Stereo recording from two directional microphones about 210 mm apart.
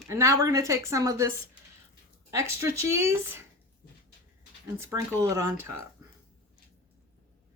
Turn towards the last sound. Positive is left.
turn(degrees=-15)  # may be behind; listen again after turning